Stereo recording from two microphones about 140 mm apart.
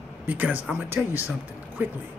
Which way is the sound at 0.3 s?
10° right (ahead or behind).